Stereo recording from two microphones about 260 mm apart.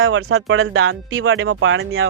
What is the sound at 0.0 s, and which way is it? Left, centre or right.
Speech, right.